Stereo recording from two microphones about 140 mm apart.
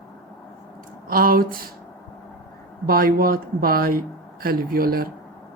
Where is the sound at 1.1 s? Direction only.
90° right.